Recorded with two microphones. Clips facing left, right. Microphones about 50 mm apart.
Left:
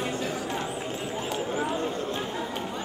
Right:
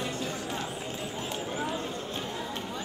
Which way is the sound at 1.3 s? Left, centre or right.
Centre.